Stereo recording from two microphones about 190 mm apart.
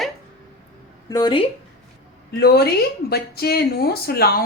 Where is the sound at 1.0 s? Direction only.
20° left (ahead or behind).